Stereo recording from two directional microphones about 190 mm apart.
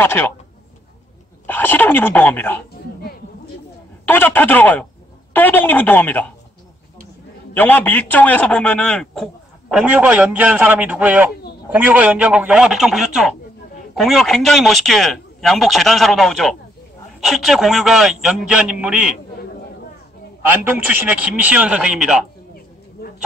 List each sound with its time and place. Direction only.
0.0 s speech: 10° left (ahead or behind)
1.5 s speech: 10° left (ahead or behind)
4.0 s speech: 10° left (ahead or behind)
7.5 s a man's voice: 10° left (ahead or behind); by 19.1 s 5° right (ahead or behind)
20.4 s a man's voice: 10° right (ahead or behind)
23.0 s bird: 55° left (ahead or behind)